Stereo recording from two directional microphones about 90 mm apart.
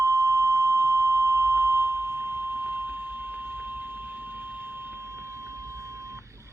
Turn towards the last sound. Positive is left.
turn(degrees=-30)  # may be behind; listen again after turning